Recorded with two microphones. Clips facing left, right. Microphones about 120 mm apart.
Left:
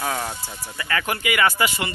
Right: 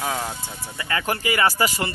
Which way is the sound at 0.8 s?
25° right (ahead or behind).